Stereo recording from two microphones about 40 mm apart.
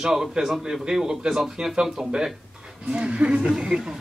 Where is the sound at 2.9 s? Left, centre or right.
Right.